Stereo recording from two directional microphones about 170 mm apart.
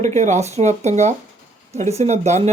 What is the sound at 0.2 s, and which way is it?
Speech, 45° right (ahead or behind).